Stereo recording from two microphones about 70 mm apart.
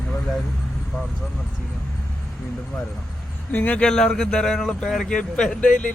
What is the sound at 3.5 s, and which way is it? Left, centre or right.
Speech, left.